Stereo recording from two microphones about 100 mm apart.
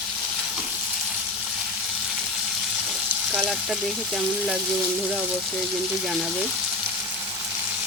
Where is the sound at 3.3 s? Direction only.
Centre (ahead or behind).